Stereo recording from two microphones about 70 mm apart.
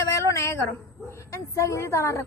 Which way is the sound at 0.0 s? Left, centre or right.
Left.